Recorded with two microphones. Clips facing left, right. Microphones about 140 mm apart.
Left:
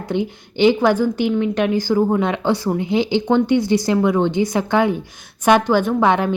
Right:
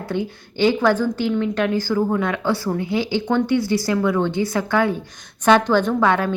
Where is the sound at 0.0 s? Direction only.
20° left (ahead or behind).